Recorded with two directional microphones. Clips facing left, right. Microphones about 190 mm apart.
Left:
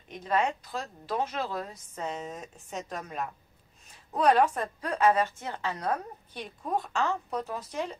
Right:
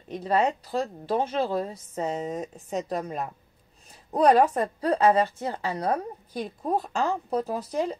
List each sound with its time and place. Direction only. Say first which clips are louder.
0.1 s a woman's voice: right 4 dB; 35° right (ahead or behind)